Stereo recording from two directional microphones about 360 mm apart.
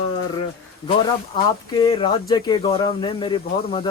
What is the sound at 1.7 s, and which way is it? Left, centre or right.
Speech, centre.